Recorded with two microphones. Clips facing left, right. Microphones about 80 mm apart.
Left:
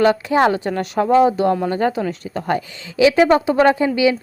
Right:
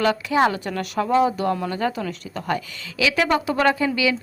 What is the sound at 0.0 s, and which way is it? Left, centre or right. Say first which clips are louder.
Speech: left 4 dB; left.